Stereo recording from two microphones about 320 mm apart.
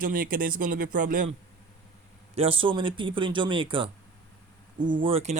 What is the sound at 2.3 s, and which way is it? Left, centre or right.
A man's voice, centre.